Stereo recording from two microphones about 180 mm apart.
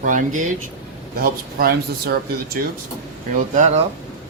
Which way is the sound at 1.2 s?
55° right (ahead or behind).